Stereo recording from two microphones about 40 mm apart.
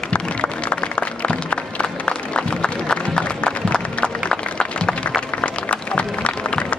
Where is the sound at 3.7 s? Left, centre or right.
Centre.